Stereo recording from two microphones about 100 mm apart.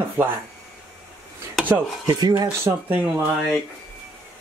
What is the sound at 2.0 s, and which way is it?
Speech, 40° right (ahead or behind).